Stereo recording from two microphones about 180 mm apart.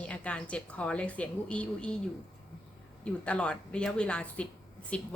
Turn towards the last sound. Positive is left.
turn(degrees=5)  # may be behind; listen again after turning